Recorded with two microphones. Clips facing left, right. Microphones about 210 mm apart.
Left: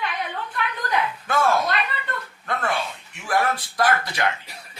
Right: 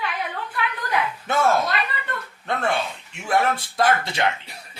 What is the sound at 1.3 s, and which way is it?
Speech, 20° right (ahead or behind).